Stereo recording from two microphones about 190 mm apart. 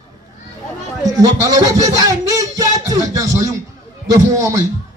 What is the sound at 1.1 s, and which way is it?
Music, 20° right (ahead or behind).